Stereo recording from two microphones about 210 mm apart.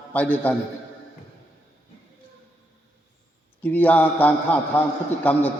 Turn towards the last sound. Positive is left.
turn(degrees=10)  # may be behind; listen again after turning